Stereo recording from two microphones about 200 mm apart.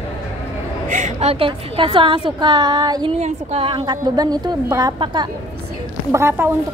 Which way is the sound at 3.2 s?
35° right (ahead or behind).